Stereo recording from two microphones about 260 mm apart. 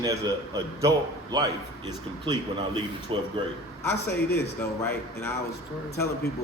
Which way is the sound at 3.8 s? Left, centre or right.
Centre.